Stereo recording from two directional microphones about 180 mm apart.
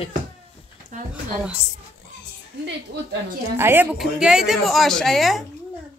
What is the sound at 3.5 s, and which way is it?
Speech, 15° right (ahead or behind).